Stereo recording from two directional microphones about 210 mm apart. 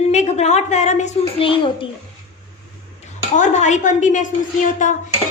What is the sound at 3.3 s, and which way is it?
Speech, 35° left (ahead or behind).